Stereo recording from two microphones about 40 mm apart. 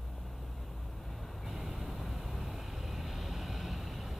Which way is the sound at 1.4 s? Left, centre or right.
Centre.